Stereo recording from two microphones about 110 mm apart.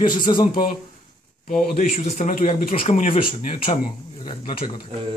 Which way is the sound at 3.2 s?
55° left (ahead or behind).